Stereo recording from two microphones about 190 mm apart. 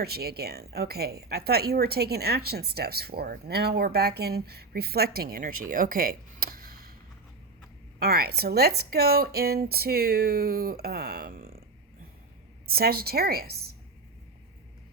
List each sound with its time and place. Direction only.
0.0 s speech: 55° right (ahead or behind)
7.9 s speech: 55° right (ahead or behind)
12.7 s speech: 55° right (ahead or behind)